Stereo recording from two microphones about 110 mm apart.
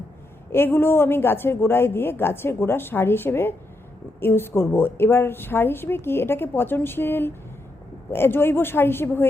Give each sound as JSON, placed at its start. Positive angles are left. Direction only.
{"t": 0.5, "sound": "a woman's voice", "side_deg": 20}